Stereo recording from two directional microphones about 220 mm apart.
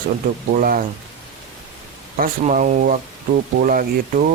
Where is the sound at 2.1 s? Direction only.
40° right (ahead or behind).